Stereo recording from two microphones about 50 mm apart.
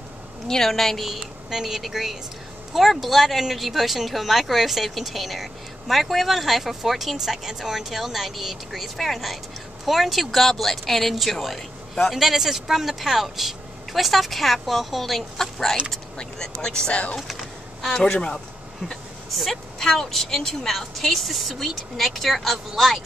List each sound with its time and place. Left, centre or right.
0.5 s speech: centre
12.2 s speech: centre
18.9 s speech: centre